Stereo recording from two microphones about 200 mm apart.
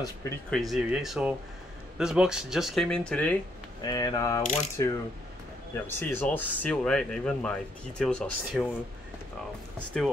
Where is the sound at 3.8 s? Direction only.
20° left (ahead or behind).